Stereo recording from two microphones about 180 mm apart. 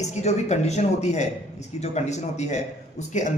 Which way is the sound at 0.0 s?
40° left (ahead or behind).